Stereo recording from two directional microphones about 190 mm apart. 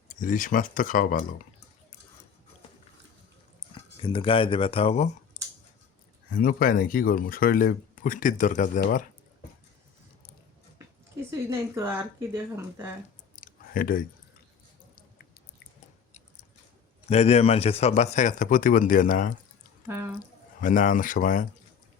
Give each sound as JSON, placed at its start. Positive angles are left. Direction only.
{"t": 0.1, "sound": "speech", "side_deg": 45}
{"t": 3.6, "sound": "a sound", "side_deg": 25}
{"t": 4.0, "sound": "speech", "side_deg": 25}
{"t": 6.3, "sound": "speech", "side_deg": 50}
{"t": 10.8, "sound": "speech", "side_deg": -15}
{"t": 13.4, "sound": "clicking", "side_deg": 45}
{"t": 17.1, "sound": "a man's voice", "side_deg": 35}
{"t": 20.6, "sound": "speech", "side_deg": 45}